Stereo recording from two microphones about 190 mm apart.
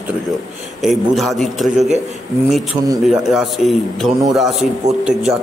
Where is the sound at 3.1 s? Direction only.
Centre (ahead or behind).